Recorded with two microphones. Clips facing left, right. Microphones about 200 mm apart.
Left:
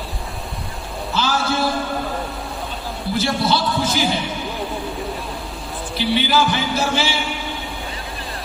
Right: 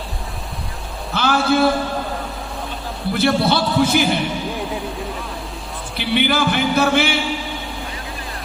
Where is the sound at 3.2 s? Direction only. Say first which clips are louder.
Right 3 dB; 60° right (ahead or behind).